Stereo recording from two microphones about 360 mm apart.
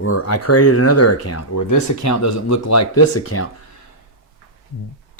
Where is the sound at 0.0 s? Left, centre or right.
Left.